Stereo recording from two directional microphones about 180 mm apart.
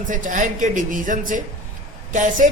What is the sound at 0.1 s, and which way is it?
Speech, 45° right (ahead or behind).